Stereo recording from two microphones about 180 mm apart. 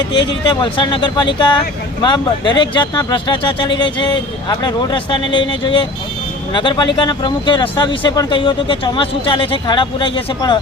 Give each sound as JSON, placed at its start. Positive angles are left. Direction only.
{"t": 0.1, "sound": "speech", "side_deg": 25}